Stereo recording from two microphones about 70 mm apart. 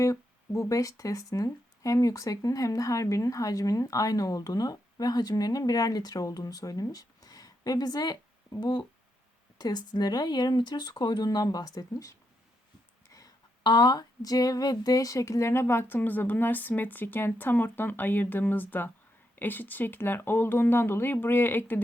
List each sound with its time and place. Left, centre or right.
0.0 s speech: left
8.6 s speech: left
13.7 s speech: left